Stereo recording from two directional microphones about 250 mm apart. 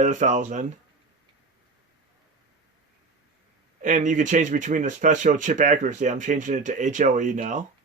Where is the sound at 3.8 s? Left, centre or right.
Right.